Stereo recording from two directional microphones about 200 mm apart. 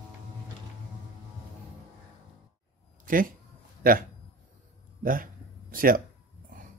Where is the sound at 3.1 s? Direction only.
45° right (ahead or behind).